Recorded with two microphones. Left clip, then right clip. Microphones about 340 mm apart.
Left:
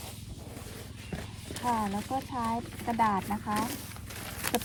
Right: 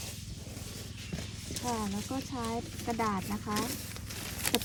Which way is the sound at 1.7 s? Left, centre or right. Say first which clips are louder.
Left 6 dB; centre.